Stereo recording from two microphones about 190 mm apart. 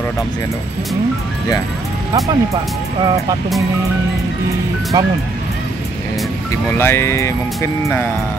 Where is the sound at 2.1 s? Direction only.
15° right (ahead or behind).